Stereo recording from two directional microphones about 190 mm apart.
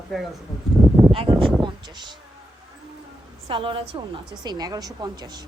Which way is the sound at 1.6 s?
25° right (ahead or behind).